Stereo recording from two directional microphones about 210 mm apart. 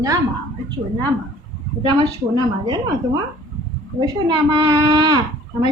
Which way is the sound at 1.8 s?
20° right (ahead or behind).